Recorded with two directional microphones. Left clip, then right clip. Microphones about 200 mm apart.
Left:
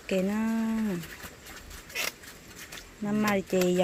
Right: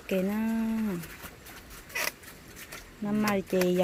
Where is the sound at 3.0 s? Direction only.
5° left (ahead or behind).